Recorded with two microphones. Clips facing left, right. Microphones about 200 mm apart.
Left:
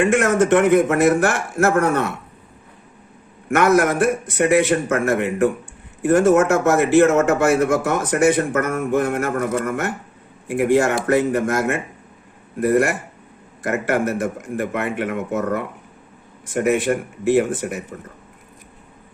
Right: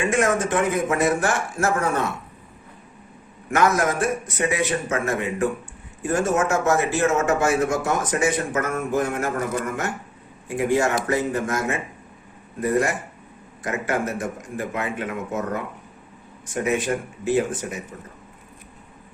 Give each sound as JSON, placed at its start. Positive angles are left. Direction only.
{"t": 0.0, "sound": "a man's voice", "side_deg": 65}
{"t": 3.5, "sound": "a man's voice", "side_deg": 65}